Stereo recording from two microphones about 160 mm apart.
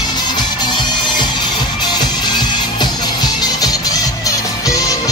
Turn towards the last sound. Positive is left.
turn(degrees=20)  # may be behind; listen again after turning